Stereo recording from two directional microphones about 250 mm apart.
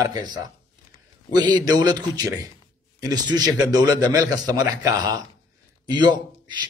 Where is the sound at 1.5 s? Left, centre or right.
Centre.